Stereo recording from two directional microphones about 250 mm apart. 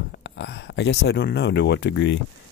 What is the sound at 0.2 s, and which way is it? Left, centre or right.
Speech, left.